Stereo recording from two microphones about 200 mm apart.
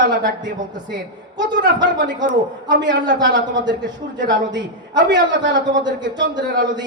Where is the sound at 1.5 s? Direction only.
60° right (ahead or behind).